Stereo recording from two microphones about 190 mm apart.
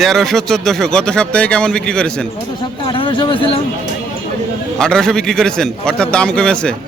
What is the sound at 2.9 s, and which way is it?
Speech, 25° left (ahead or behind).